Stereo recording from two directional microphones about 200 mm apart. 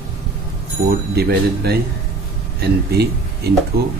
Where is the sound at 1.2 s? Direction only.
50° right (ahead or behind).